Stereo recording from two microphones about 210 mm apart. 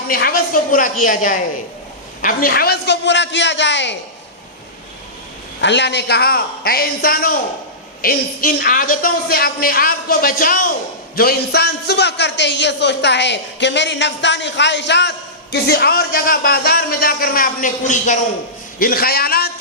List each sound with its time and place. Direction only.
0.1 s a woman's voice: 45° left (ahead or behind)
5.5 s speech: 55° left (ahead or behind)